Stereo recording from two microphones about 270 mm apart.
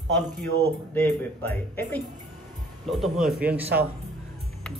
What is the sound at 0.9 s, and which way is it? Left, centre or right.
Speech, centre.